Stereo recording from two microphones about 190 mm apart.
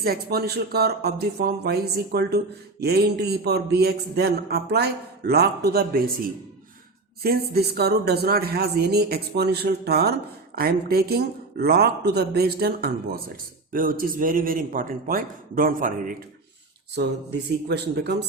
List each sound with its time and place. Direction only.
0.0 s a man's voice: 55° right (ahead or behind)
16.9 s speech: 60° right (ahead or behind)